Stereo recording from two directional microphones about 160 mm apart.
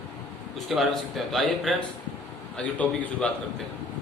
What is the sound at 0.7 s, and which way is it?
A man's voice, centre (ahead or behind).